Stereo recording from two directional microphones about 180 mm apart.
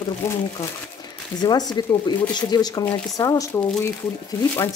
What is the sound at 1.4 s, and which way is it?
Speech, 20° left (ahead or behind).